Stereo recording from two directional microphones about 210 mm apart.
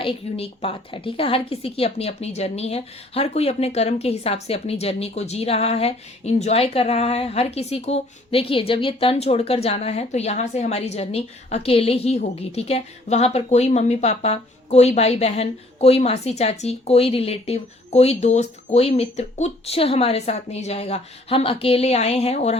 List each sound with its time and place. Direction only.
0.0 s speech: 25° left (ahead or behind)